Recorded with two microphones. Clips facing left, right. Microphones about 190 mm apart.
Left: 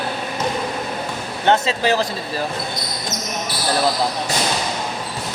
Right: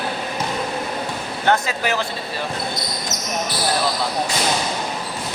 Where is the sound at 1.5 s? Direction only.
25° left (ahead or behind).